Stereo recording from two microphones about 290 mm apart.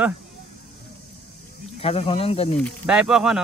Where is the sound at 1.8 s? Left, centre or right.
Centre.